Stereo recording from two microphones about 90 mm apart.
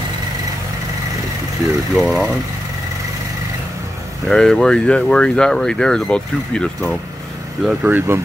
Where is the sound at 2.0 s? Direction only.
Centre (ahead or behind).